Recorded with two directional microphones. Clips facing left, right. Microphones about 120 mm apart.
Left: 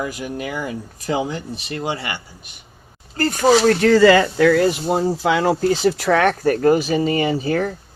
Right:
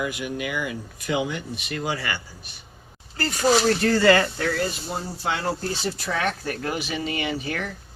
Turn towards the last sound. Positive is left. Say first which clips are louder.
# left 9 dB
turn(degrees=35)  # may be behind; listen again after turning